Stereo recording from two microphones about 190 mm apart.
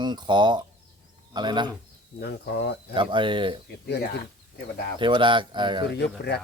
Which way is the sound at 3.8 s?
60° left (ahead or behind).